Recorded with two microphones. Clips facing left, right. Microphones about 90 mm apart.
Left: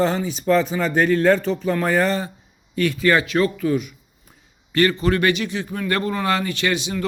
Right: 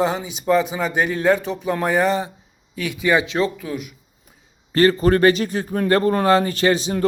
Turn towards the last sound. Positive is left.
turn(degrees=-35)  # may be behind; listen again after turning